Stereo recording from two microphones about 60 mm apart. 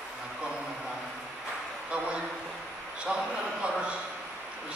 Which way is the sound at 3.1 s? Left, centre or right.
Right.